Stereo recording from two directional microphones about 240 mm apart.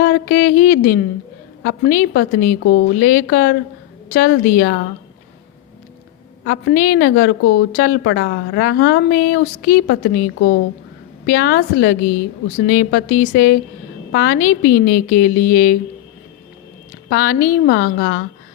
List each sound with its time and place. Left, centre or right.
0.0 s a sound: left
1.6 s a woman's voice: left
6.4 s a woman's voice: left
17.1 s a woman's voice: left